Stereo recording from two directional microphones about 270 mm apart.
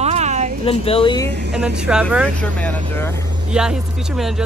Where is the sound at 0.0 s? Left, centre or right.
Right.